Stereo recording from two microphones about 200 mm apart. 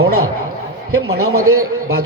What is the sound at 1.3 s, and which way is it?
Speech, 90° right.